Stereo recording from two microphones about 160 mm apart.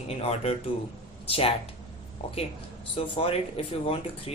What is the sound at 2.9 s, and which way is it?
Speech, 35° left (ahead or behind).